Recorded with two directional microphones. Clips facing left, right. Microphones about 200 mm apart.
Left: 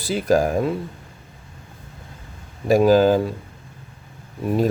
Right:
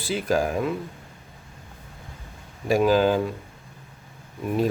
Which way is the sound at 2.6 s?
40° left (ahead or behind).